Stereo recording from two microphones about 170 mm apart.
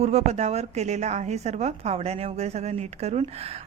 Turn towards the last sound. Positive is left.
turn(degrees=-35)  # may be behind; listen again after turning